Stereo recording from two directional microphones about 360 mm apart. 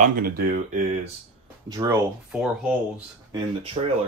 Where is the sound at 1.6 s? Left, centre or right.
Centre.